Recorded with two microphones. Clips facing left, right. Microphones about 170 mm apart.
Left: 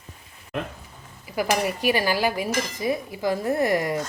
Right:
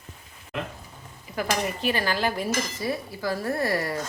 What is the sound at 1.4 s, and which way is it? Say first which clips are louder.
Speech: left 3 dB; 10° left (ahead or behind).